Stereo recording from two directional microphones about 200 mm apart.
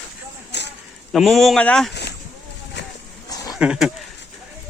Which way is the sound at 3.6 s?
5° right (ahead or behind).